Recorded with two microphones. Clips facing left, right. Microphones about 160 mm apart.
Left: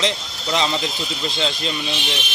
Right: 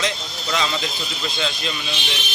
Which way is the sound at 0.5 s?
30° left (ahead or behind).